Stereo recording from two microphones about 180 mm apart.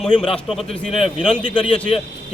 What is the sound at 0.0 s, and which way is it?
Speech, 5° left (ahead or behind).